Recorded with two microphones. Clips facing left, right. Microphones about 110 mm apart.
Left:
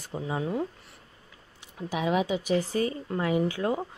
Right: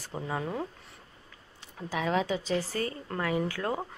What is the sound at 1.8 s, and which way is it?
A woman's voice, 15° left (ahead or behind).